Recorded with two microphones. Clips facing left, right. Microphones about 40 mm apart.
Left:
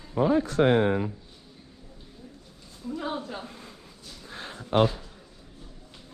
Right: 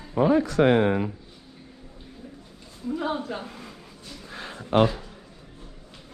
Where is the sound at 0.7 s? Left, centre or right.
Right.